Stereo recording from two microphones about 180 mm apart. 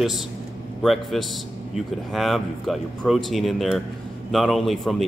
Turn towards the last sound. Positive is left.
turn(degrees=0)  # may be behind; listen again after turning